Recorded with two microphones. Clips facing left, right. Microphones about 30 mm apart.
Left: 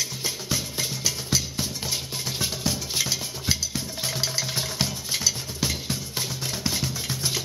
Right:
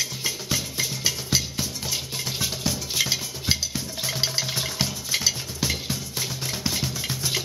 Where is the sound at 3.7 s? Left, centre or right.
Centre.